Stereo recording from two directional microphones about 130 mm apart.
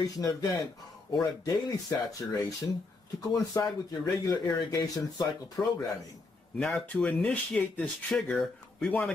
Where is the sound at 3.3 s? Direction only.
30° left (ahead or behind).